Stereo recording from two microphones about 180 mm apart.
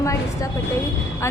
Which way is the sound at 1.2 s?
15° left (ahead or behind).